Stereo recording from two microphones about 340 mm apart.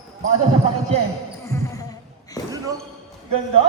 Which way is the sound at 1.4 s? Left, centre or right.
Centre.